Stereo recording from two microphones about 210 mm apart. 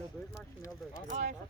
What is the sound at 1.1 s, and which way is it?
Speech, 35° right (ahead or behind).